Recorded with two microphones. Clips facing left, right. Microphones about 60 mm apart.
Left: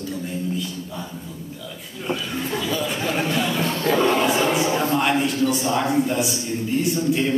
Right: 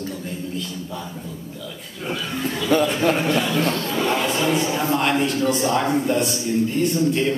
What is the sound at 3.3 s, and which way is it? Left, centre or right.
Speech, centre.